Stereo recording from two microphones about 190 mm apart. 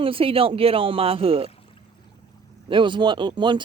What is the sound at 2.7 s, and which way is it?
Speech, 25° right (ahead or behind).